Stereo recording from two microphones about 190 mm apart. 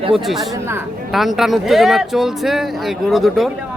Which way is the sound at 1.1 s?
Centre (ahead or behind).